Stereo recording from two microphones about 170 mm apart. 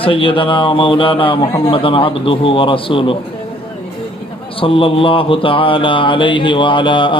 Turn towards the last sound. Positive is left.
turn(degrees=30)  # may be behind; listen again after turning